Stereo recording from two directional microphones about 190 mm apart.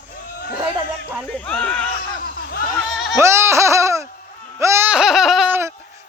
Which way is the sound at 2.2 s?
50° left (ahead or behind).